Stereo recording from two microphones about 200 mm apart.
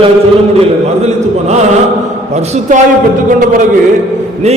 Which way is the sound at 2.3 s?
35° right (ahead or behind).